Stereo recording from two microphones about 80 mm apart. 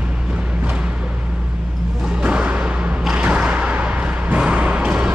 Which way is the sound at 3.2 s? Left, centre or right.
Centre.